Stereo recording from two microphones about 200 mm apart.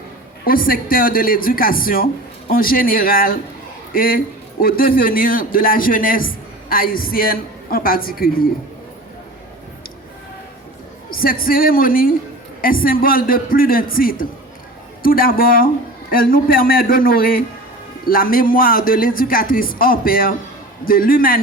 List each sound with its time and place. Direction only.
0.4 s a man's voice: 45° left (ahead or behind)
11.1 s a man's voice: 45° left (ahead or behind)